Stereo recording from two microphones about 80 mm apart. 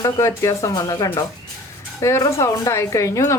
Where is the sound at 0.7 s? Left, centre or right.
Left.